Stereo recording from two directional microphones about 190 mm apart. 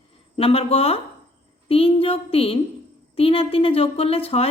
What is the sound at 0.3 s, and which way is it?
A woman's voice, 30° left (ahead or behind).